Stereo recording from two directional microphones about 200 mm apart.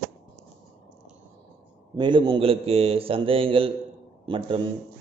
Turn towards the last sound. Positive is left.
turn(degrees=-25)  # may be behind; listen again after turning